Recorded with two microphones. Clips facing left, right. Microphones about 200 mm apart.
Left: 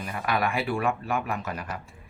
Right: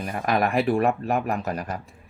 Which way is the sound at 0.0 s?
40° right (ahead or behind).